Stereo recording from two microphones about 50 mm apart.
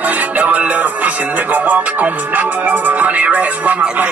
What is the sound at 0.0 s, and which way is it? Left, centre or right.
Music, right.